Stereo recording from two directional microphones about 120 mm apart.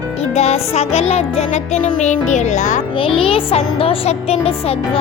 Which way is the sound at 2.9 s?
50° left (ahead or behind).